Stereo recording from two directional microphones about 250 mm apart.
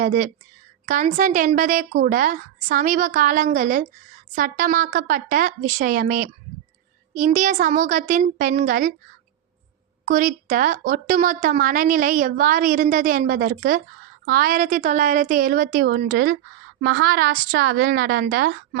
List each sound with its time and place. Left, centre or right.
0.0 s a woman's voice: right
10.1 s a woman's voice: right